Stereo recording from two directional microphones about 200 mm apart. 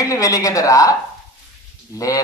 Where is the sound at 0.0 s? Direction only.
15° left (ahead or behind).